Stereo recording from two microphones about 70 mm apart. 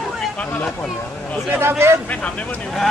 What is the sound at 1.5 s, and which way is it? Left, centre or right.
Speech, right.